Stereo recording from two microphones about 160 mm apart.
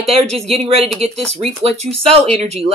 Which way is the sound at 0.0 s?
40° right (ahead or behind).